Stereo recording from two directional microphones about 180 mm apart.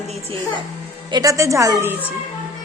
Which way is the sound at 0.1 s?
30° right (ahead or behind).